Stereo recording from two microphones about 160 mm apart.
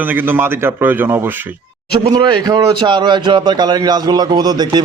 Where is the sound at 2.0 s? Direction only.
30° right (ahead or behind).